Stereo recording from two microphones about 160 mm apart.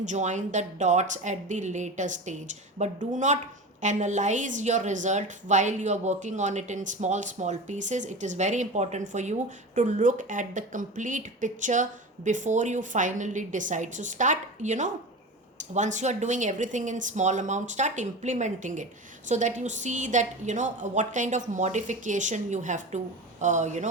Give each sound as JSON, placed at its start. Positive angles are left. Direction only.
{"t": 0.0, "sound": "a woman's voice", "side_deg": -50}